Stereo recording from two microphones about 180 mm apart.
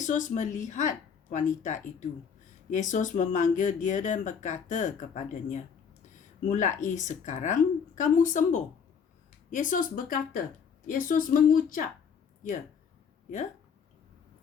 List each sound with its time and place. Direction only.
0.0 s speech: 45° left (ahead or behind)